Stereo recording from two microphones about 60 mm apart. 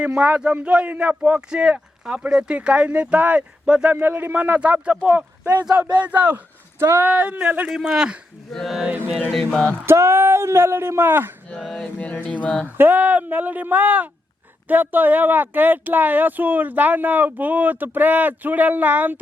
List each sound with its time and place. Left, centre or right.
0.0 s speech: centre
7.7 s speech: centre
8.5 s mantra: centre
9.3 s a sound: centre
9.8 s speech: right
11.8 s speech: left
12.6 s speech: right